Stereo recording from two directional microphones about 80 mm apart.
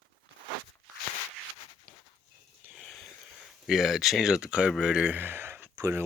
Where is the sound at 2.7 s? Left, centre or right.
Centre.